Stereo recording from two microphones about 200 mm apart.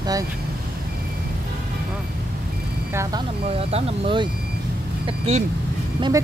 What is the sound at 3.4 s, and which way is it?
Speech, 30° right (ahead or behind).